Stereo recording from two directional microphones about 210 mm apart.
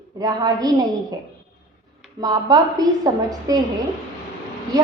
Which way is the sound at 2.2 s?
20° right (ahead or behind).